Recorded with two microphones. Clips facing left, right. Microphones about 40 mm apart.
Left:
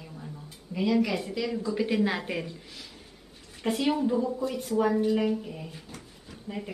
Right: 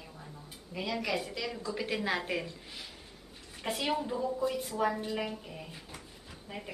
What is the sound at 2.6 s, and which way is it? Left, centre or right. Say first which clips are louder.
Speech: even; centre.